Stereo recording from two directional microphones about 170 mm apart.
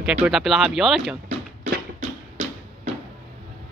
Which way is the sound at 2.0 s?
40° right (ahead or behind).